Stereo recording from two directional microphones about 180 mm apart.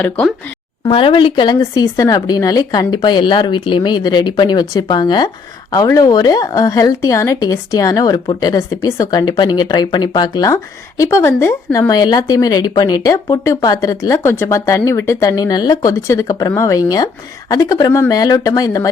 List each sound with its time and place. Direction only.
0.9 s speech: 30° left (ahead or behind)